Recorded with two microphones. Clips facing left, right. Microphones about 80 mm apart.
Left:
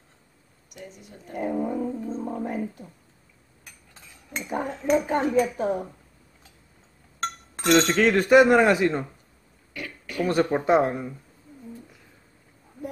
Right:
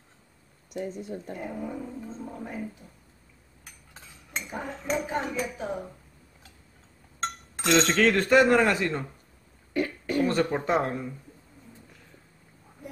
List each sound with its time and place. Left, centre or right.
0.7 s speech: right
1.4 s music: left
4.5 s speech: left
7.6 s speech: centre
9.8 s throat clearing: right
10.2 s speech: centre